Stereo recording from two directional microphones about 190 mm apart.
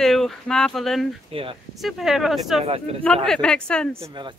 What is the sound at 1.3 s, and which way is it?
Speech, 30° right (ahead or behind).